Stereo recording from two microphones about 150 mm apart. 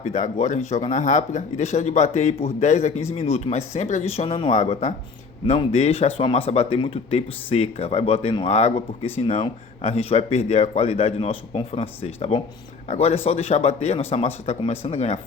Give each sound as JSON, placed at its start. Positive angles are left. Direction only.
{"t": 0.0, "sound": "speech", "side_deg": 50}
{"t": 4.5, "sound": "speech", "side_deg": 50}